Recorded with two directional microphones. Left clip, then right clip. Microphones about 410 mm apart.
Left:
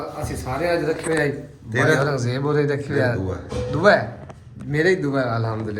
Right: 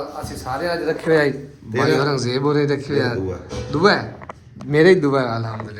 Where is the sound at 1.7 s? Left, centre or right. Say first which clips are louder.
Right 1 dB; centre.